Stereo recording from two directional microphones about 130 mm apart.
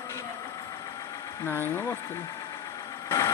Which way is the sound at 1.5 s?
15° left (ahead or behind).